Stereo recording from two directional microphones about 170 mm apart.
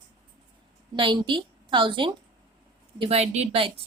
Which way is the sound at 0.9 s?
30° right (ahead or behind).